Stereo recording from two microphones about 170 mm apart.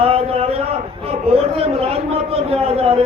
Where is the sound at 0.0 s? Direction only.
35° right (ahead or behind).